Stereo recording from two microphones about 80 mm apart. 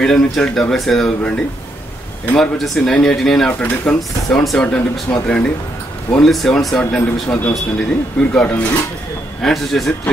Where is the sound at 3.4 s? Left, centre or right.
Centre.